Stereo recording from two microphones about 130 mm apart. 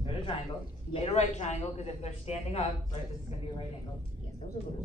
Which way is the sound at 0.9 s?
55° left (ahead or behind).